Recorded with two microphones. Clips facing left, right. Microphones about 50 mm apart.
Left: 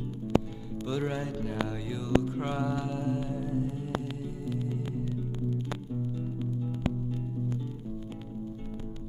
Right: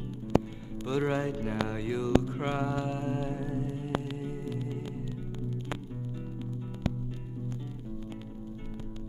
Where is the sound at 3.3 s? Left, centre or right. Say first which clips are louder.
Left 2 dB; right.